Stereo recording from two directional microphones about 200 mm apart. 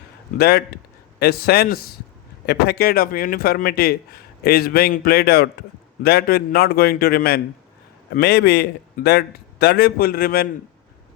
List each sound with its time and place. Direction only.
0.3 s a man's voice: 50° left (ahead or behind)